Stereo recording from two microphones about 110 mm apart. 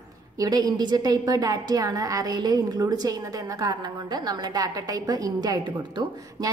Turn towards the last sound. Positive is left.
turn(degrees=-40)  # may be behind; listen again after turning